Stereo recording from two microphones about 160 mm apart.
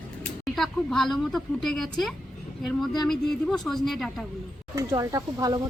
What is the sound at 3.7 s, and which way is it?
Speech, centre (ahead or behind).